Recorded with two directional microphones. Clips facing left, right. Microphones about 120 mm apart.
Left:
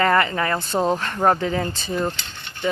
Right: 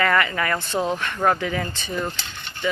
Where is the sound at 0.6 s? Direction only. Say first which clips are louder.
Left 3 dB; 40° left (ahead or behind).